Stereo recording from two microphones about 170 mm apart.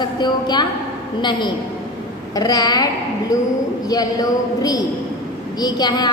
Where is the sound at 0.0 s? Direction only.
25° left (ahead or behind).